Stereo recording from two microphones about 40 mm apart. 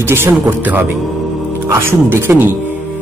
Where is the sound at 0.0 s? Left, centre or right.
Right.